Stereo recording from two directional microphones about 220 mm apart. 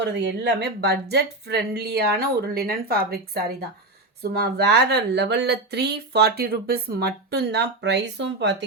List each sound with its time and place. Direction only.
0.0 s speech: 50° right (ahead or behind)
4.2 s speech: 45° right (ahead or behind)